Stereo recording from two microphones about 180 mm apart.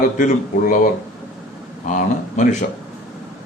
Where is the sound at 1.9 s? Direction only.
45° left (ahead or behind).